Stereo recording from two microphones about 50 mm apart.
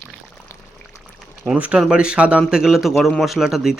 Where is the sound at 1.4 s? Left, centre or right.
Centre.